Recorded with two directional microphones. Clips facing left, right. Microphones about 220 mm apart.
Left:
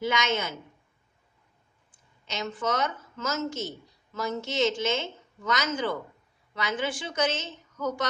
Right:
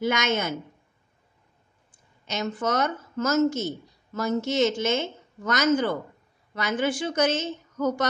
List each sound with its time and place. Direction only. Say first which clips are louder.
0.0 s speech: right 3 dB; 45° right (ahead or behind)
2.2 s speech: right 3 dB; 45° right (ahead or behind)